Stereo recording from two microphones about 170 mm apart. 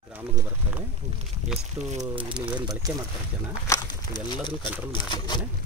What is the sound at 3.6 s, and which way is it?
Speech, 20° left (ahead or behind).